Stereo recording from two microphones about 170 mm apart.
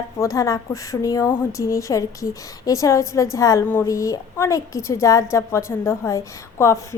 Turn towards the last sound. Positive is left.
turn(degrees=15)  # may be behind; listen again after turning